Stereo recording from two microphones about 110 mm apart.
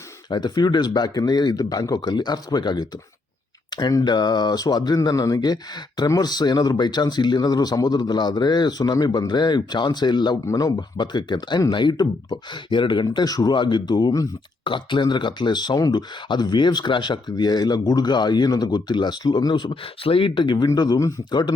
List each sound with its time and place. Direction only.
0.3 s speech: 40° left (ahead or behind)